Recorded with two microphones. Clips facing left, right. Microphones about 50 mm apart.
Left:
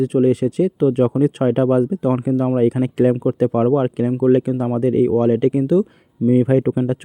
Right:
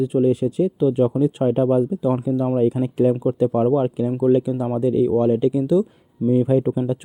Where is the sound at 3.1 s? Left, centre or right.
Left.